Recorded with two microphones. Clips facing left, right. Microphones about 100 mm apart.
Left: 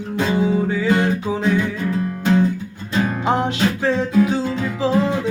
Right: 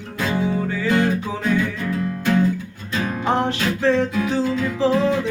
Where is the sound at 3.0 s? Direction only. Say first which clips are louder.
Left 2 dB; 15° left (ahead or behind).